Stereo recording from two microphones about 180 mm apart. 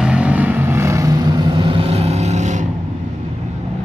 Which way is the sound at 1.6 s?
30° right (ahead or behind).